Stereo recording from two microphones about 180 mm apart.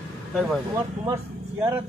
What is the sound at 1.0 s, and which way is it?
Vehicle, 15° right (ahead or behind).